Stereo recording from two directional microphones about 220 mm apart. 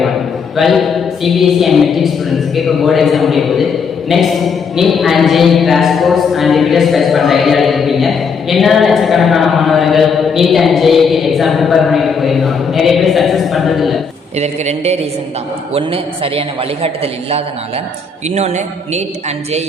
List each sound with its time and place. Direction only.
0.5 s speech: centre (ahead or behind)
14.3 s a man's voice: 30° right (ahead or behind)